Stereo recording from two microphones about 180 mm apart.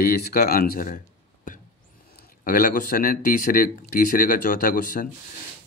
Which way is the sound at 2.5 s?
50° left (ahead or behind).